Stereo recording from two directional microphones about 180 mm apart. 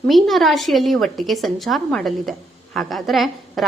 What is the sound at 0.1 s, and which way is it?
A woman's voice, centre (ahead or behind).